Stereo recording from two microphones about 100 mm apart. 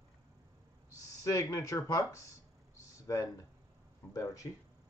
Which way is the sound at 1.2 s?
35° left (ahead or behind).